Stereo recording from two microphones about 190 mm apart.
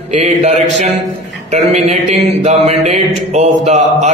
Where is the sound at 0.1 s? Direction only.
40° right (ahead or behind).